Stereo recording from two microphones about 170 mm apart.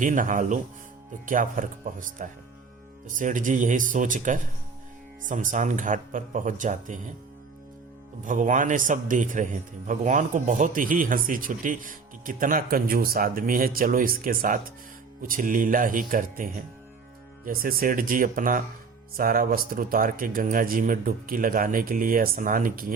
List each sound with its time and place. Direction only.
0.0 s a man's voice: 50° right (ahead or behind)
8.2 s a man's voice: 50° right (ahead or behind)